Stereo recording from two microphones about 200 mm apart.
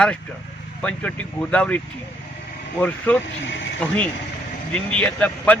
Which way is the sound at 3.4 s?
65° left (ahead or behind).